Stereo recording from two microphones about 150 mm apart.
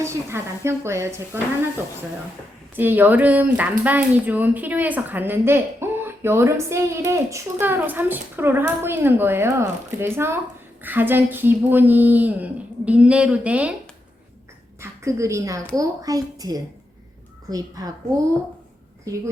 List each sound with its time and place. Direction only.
0.0 s speech: 20° right (ahead or behind)
2.7 s speech: 10° right (ahead or behind)
14.8 s a woman's voice: 20° right (ahead or behind)